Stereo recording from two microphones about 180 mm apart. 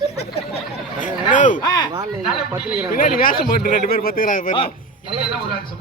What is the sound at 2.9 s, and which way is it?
Speech, 50° left (ahead or behind).